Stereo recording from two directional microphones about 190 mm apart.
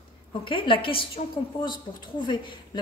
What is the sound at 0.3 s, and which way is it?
A woman's voice, 25° left (ahead or behind).